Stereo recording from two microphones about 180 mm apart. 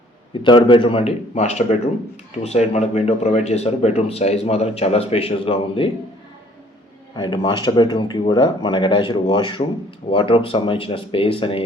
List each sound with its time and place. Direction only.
0.4 s speech: 25° left (ahead or behind)
7.2 s speech: 25° left (ahead or behind)